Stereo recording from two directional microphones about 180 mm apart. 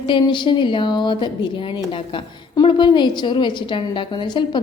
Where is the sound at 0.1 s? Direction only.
25° left (ahead or behind).